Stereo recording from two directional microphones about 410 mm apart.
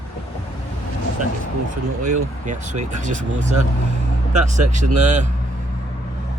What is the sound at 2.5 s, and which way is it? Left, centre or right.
Speech, centre.